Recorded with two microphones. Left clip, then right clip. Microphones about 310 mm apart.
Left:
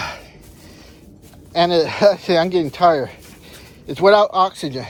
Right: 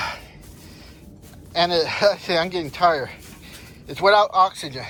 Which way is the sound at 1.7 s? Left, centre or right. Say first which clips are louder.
Left 5 dB; centre.